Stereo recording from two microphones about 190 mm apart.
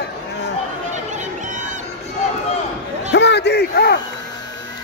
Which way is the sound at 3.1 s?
70° left (ahead or behind).